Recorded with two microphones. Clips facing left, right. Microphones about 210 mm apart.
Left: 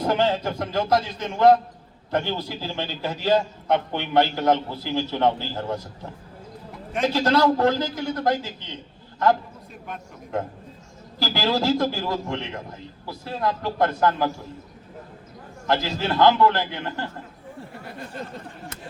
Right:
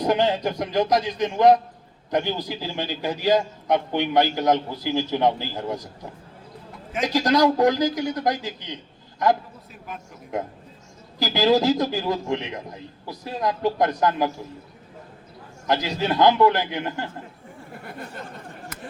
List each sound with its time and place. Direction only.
0.0 s a man's voice: 15° right (ahead or behind)
7.0 s a man's voice: 15° right (ahead or behind)
10.3 s a man's voice: 15° right (ahead or behind)
15.6 s a man's voice: 15° right (ahead or behind)